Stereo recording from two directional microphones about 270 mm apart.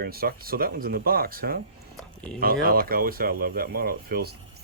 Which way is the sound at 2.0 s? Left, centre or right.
Centre.